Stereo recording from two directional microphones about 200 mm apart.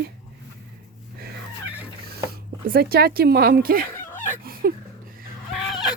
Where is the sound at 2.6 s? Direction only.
50° right (ahead or behind).